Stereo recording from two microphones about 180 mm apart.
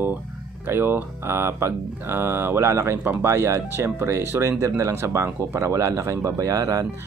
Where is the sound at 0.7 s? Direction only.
10° right (ahead or behind).